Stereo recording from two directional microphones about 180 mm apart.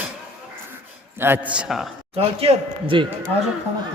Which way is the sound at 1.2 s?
10° right (ahead or behind).